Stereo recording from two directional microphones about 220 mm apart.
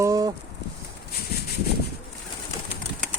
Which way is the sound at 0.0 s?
15° right (ahead or behind).